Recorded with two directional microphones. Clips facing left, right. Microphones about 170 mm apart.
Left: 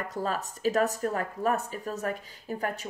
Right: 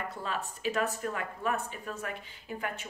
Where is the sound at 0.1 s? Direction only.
40° left (ahead or behind).